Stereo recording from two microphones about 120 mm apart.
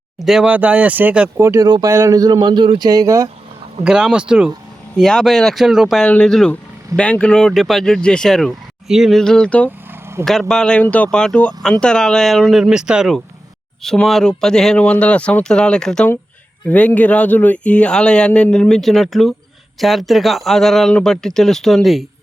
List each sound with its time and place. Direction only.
0.2 s speech: 5° right (ahead or behind)
1.4 s speech: 25° right (ahead or behind)
3.8 s speech: 5° right (ahead or behind)
6.0 s speech: 10° left (ahead or behind)